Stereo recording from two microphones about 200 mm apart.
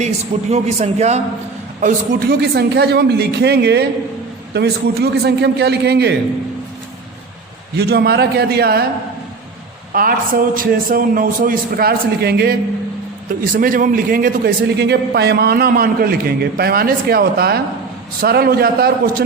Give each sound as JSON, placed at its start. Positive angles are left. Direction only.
{"t": 0.5, "sound": "a man's voice", "side_deg": -35}
{"t": 1.8, "sound": "speech", "side_deg": -50}
{"t": 7.8, "sound": "a man's voice", "side_deg": -55}
{"t": 9.9, "sound": "a man's voice", "side_deg": -45}